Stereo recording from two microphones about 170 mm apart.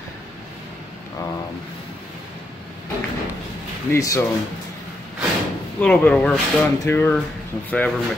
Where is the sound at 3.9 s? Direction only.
15° left (ahead or behind).